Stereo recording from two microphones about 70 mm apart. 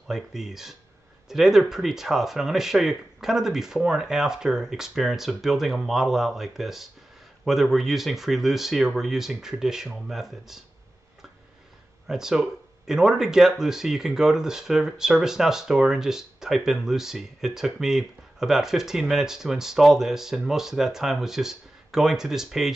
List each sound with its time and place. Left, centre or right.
0.1 s speech: centre
12.1 s speech: centre